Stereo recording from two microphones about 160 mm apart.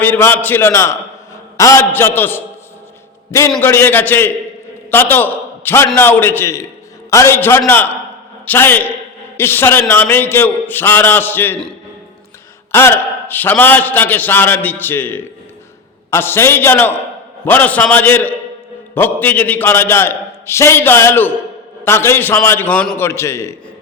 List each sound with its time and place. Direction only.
0.0 s a man's voice: 10° left (ahead or behind)
3.6 s a man's voice: 15° left (ahead or behind)
12.7 s a man's voice: 15° left (ahead or behind)